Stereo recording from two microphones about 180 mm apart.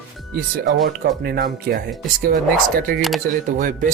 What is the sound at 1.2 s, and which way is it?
Speech, 60° right (ahead or behind).